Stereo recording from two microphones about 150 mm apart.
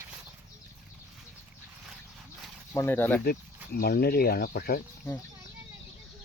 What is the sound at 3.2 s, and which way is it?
Speech, 90° left.